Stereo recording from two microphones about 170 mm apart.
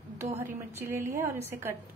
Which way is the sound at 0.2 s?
15° right (ahead or behind).